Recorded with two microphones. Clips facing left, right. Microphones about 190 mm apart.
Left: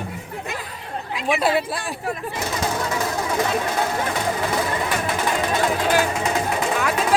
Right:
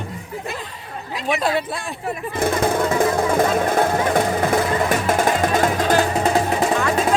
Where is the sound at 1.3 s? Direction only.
5° left (ahead or behind).